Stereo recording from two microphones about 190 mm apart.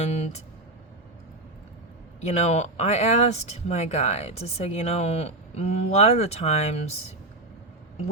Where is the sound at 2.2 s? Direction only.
35° left (ahead or behind).